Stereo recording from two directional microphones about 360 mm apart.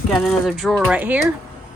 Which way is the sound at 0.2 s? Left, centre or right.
Centre.